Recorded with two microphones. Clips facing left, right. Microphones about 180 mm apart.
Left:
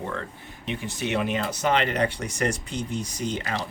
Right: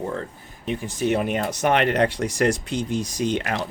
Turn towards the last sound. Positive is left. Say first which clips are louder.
# right 6 dB
turn(degrees=-80)